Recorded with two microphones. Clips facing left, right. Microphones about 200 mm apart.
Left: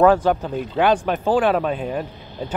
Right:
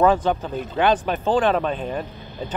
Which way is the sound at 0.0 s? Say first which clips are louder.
Left 3 dB; 10° left (ahead or behind).